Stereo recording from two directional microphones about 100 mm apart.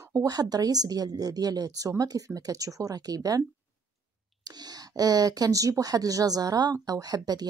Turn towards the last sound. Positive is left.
turn(degrees=-40)  # may be behind; listen again after turning